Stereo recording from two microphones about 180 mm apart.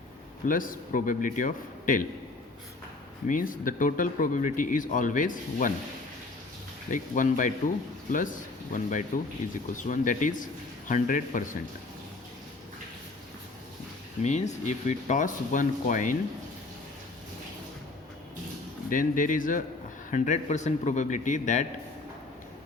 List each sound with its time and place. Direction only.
0.4 s speech: 50° left (ahead or behind)
3.2 s speech: 50° left (ahead or behind)
6.9 s speech: 45° left (ahead or behind)
14.2 s speech: 40° left (ahead or behind)
18.9 s speech: 45° left (ahead or behind)